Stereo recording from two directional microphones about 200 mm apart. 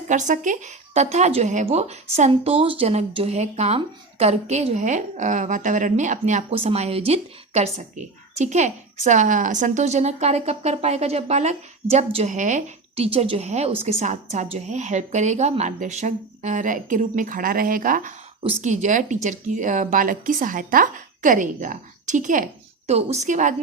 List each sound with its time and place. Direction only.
0.1 s speech: 40° right (ahead or behind)